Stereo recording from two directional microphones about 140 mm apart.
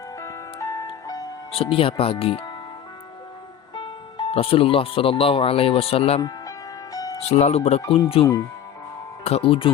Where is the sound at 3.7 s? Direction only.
40° left (ahead or behind).